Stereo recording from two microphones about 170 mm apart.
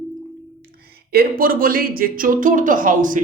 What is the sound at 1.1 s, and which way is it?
Speech, 60° right (ahead or behind).